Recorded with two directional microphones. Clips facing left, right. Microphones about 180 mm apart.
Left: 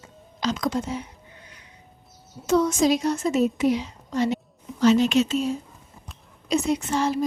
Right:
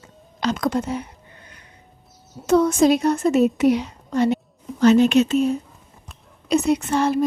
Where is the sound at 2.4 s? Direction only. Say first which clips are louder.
Right 4 dB; 55° right (ahead or behind).